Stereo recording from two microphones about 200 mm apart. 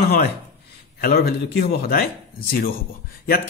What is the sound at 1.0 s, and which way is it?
Speech, 50° left (ahead or behind).